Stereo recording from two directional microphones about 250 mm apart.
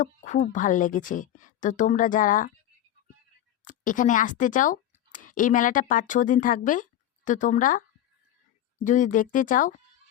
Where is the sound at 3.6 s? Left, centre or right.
Left.